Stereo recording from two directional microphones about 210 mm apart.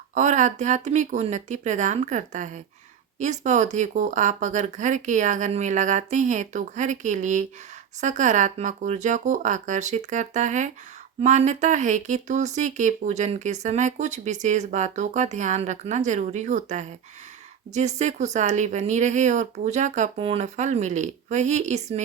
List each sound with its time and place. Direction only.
0.1 s speech: 35° right (ahead or behind)